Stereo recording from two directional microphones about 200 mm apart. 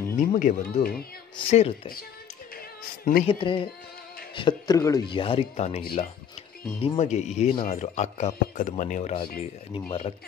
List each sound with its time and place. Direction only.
0.2 s speech: 40° left (ahead or behind)
1.3 s speech: 30° left (ahead or behind)
3.3 s speech: 25° left (ahead or behind)